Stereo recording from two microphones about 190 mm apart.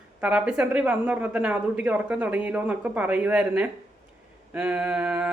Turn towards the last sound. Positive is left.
turn(degrees=-5)  # may be behind; listen again after turning